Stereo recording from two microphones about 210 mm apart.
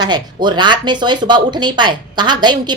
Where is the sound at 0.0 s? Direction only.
20° right (ahead or behind).